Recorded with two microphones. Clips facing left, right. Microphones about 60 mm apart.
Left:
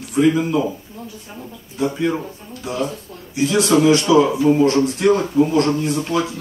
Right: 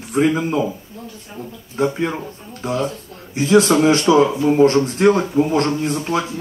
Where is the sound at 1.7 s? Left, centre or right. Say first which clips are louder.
Even; right.